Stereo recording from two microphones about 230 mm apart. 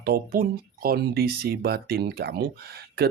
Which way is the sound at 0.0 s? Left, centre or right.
Right.